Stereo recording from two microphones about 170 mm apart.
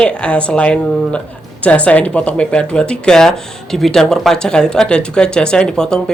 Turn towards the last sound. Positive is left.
turn(degrees=5)  # may be behind; listen again after turning